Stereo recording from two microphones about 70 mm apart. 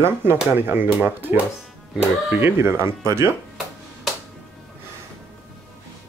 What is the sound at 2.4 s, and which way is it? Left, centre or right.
Speech, right.